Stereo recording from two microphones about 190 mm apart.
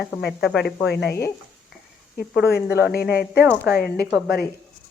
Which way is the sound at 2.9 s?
55° left (ahead or behind).